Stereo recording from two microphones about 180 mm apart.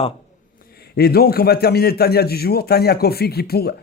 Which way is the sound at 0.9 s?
60° left (ahead or behind).